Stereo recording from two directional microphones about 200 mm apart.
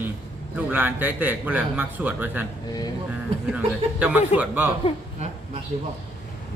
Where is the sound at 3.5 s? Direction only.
5° right (ahead or behind).